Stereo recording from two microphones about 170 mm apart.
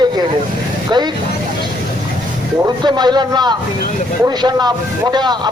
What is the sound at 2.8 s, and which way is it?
Speech, 25° right (ahead or behind).